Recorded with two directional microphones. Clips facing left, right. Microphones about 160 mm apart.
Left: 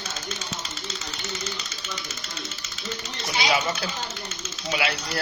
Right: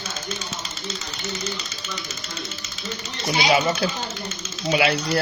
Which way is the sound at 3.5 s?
30° right (ahead or behind).